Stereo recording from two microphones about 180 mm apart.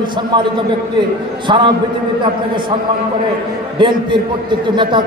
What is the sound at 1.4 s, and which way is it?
Speech, 25° right (ahead or behind).